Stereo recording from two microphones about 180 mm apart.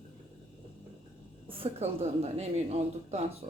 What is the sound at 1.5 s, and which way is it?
A woman's voice, 35° right (ahead or behind).